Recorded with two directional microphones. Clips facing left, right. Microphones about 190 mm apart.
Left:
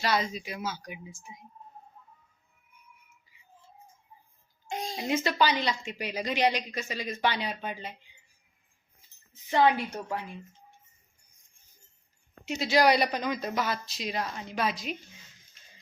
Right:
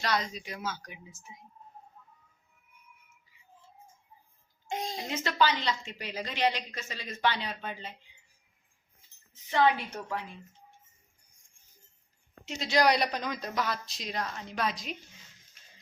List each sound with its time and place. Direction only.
0.0 s a woman's voice: 5° left (ahead or behind)
4.7 s speech: 20° right (ahead or behind)
5.0 s a woman's voice: 15° left (ahead or behind)
9.5 s a woman's voice: 15° left (ahead or behind)
12.5 s speech: 5° left (ahead or behind)